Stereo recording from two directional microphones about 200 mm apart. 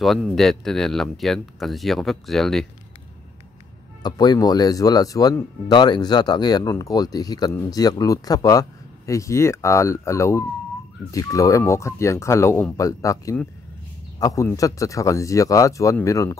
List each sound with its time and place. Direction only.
0.0 s speech: centre (ahead or behind)
4.0 s speech: 20° left (ahead or behind)